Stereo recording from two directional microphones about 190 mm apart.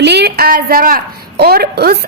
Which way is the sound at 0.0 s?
60° right (ahead or behind).